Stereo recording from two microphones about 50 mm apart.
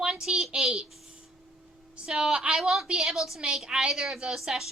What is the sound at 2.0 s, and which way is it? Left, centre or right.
A woman's voice, centre.